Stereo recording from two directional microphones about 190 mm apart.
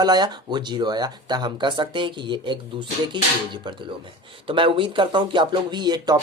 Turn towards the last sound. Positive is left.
turn(degrees=-20)  # may be behind; listen again after turning